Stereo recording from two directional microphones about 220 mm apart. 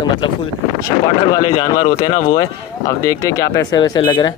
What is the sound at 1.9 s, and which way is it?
Speech, 30° left (ahead or behind).